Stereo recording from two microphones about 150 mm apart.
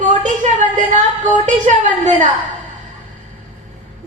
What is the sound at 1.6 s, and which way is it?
Speech, 55° right (ahead or behind).